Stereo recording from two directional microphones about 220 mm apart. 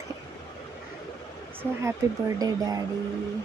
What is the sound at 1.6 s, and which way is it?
Speech, 10° right (ahead or behind).